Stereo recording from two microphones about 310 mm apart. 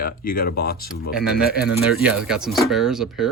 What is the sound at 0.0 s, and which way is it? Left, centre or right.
Speech, left.